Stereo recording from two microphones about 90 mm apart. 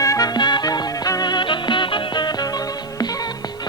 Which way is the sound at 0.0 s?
40° left (ahead or behind).